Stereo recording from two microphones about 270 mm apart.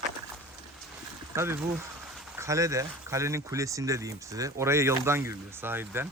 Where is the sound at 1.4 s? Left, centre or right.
Centre.